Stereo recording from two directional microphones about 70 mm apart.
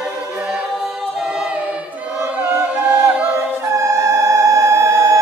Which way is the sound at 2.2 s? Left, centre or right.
Right.